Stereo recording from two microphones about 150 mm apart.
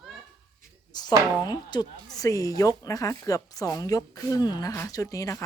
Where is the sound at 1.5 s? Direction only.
30° left (ahead or behind).